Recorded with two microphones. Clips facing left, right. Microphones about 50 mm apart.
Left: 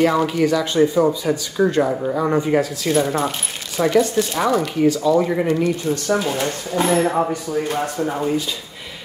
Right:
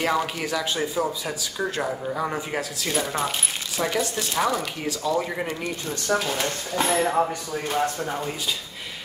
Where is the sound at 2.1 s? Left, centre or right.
Centre.